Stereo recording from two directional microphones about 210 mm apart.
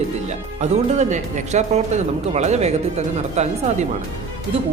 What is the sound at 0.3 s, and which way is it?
Speech, 35° right (ahead or behind).